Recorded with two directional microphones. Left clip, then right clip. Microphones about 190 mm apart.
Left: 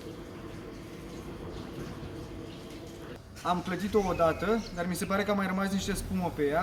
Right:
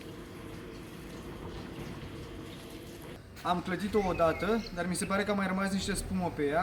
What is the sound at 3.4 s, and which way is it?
A man's voice, centre (ahead or behind).